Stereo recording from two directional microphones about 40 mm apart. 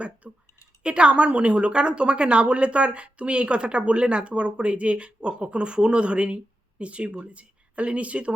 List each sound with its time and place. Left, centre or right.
0.2 s speech: right
0.8 s a woman's voice: right